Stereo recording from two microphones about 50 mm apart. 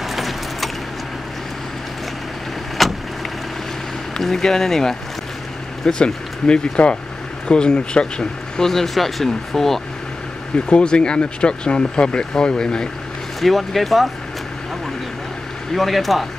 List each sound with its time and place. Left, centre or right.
0.0 s keys jangling: centre
2.8 s vehicle: centre
4.2 s speech: centre
10.7 s speech: centre
13.4 s speech: centre
15.7 s speech: centre